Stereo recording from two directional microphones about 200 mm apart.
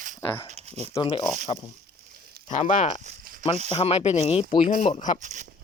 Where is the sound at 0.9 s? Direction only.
25° left (ahead or behind).